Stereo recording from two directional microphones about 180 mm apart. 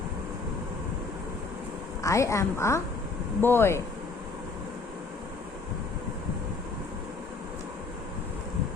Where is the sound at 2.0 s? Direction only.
15° left (ahead or behind).